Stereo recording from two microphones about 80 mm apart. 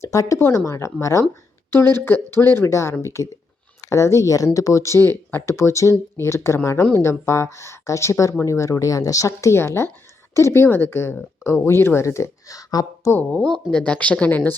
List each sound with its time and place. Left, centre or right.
0.0 s speech: left
0.3 s speech: left
13.3 s speech: centre